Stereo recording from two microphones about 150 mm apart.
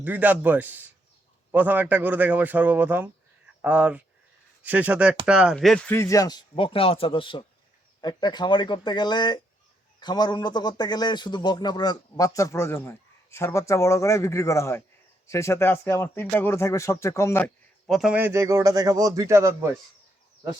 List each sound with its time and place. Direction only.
0.0 s a man's voice: 10° right (ahead or behind)
5.9 s a man's voice: 20° left (ahead or behind)
17.4 s a man's voice: centre (ahead or behind); by 19.7 s 20° right (ahead or behind)